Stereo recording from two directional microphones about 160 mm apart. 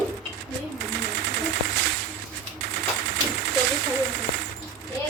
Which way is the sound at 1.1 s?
90° right.